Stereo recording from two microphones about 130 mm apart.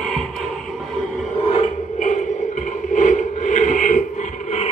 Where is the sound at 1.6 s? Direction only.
65° left (ahead or behind).